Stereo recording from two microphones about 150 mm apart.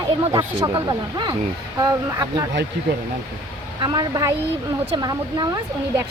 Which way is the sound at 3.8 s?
25° right (ahead or behind).